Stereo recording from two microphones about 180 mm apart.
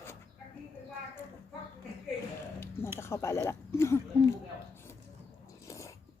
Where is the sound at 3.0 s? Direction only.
15° left (ahead or behind).